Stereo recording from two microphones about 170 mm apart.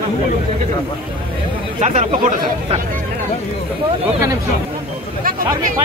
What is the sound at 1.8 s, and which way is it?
Speech, 45° right (ahead or behind).